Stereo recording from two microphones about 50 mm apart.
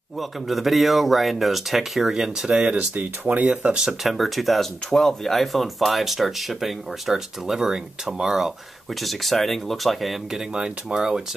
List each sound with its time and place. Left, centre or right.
0.2 s speech: centre
2.6 s speech: right
3.7 s speech: centre
9.0 s speech: centre
10.5 s speech: right
11.0 s speech: centre